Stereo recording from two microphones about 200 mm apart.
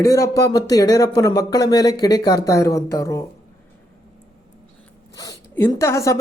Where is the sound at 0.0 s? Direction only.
15° left (ahead or behind).